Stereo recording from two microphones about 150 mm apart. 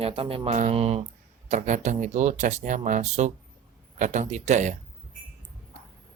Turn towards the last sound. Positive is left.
turn(degrees=-50)  # may be behind; listen again after turning